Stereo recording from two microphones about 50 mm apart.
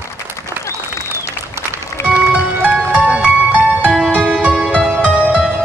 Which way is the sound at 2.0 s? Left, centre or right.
Right.